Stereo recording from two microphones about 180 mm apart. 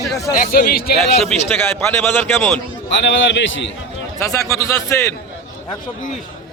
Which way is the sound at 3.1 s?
90° left.